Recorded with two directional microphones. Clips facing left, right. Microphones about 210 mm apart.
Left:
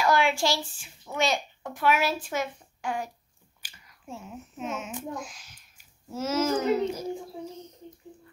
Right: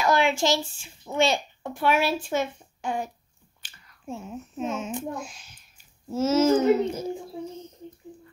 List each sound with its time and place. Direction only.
0.0 s a child's voice: 20° right (ahead or behind)
3.6 s finger snapping: 10° left (ahead or behind)
4.1 s a child's voice: 30° right (ahead or behind)